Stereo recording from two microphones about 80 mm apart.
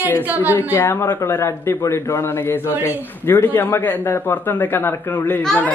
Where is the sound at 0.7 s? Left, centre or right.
Left.